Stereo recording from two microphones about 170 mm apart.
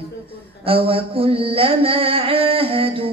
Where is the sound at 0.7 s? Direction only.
30° right (ahead or behind).